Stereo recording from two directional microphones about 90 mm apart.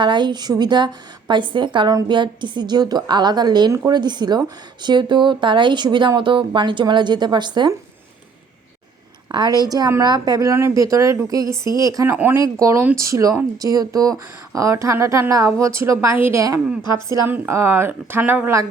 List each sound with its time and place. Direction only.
0.0 s speech: 60° right (ahead or behind)
1.3 s a woman's voice: 65° right (ahead or behind)
9.3 s a woman's voice: 50° right (ahead or behind)
10.5 s speech: 35° right (ahead or behind)
12.0 s speech: 20° right (ahead or behind)
12.5 s speech: 35° right (ahead or behind)
16.1 s speech: 25° right (ahead or behind)